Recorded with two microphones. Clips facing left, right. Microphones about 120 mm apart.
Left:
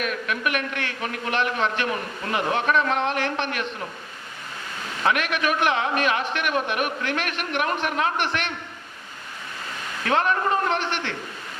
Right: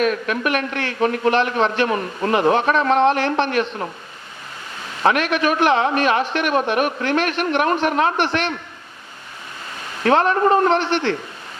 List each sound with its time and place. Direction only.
0.0 s a man's voice: 35° right (ahead or behind)
5.0 s a man's voice: 30° right (ahead or behind)
10.0 s a man's voice: 35° right (ahead or behind)